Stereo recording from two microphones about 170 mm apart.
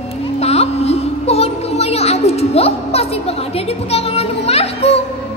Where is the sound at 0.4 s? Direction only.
40° left (ahead or behind).